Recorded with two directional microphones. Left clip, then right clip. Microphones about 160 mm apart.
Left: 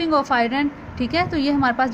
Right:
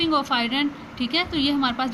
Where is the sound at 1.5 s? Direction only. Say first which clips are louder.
Left 4 dB; 35° left (ahead or behind).